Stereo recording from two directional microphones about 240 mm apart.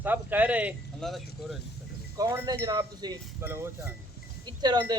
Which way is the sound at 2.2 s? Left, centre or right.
Centre.